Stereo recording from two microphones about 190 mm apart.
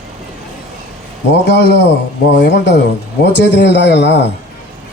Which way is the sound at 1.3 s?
60° left (ahead or behind).